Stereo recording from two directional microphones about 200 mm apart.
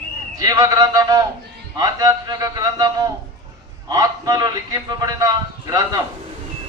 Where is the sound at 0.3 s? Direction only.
20° right (ahead or behind).